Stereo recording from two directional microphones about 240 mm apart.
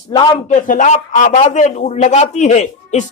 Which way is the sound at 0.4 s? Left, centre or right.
Left.